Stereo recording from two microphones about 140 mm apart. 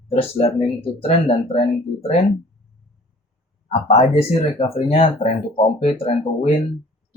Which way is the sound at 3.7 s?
50° left (ahead or behind).